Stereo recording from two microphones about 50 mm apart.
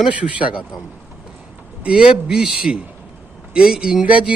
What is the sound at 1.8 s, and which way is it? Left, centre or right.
A man's voice, centre.